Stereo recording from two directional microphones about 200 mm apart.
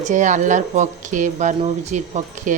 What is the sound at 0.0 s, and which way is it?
Speech, 40° right (ahead or behind).